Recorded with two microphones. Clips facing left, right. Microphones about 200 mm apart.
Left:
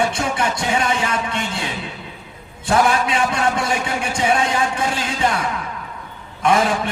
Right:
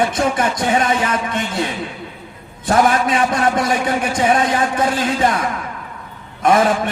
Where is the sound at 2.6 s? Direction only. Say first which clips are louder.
Right 2 dB; 45° right (ahead or behind).